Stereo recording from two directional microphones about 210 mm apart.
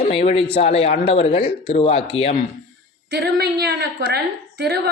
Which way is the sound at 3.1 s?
50° right (ahead or behind).